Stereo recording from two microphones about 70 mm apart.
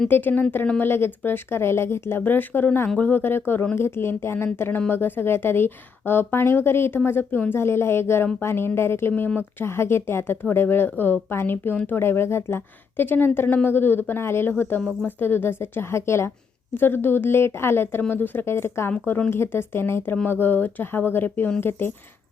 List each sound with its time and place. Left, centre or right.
0.1 s a woman's voice: left
9.6 s a woman's voice: left
18.9 s a woman's voice: left